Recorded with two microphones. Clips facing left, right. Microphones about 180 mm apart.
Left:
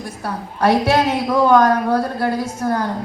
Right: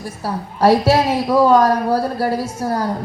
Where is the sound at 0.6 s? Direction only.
30° right (ahead or behind).